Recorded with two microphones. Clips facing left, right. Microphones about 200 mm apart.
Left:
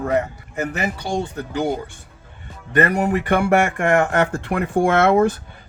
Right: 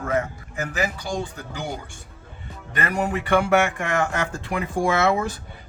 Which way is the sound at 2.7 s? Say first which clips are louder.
Left 7 dB; 55° left (ahead or behind).